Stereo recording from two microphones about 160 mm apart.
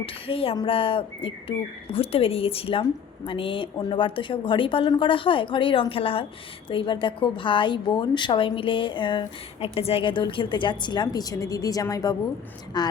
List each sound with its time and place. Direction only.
0.0 s a woman's voice: 35° left (ahead or behind)